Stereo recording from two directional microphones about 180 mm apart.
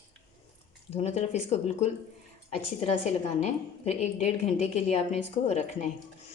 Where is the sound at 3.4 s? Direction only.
40° left (ahead or behind).